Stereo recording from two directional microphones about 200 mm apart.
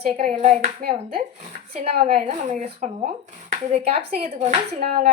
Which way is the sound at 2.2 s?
40° right (ahead or behind).